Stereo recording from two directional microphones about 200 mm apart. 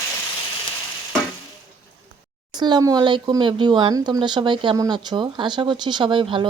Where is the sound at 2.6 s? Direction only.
20° right (ahead or behind).